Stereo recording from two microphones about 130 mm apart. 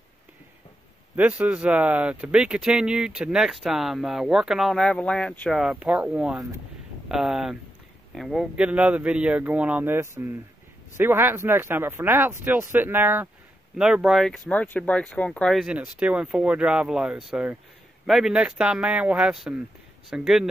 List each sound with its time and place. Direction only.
1.1 s speech: 10° right (ahead or behind); by 5.6 s 10° left (ahead or behind)
5.6 s a man's voice: 5° right (ahead or behind)
14.5 s speech: 10° left (ahead or behind)
15.6 s a man's voice: 5° right (ahead or behind)